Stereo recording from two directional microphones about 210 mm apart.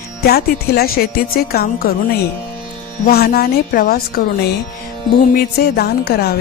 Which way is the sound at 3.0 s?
45° left (ahead or behind).